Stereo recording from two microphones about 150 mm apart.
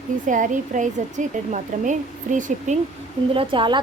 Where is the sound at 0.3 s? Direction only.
60° right (ahead or behind).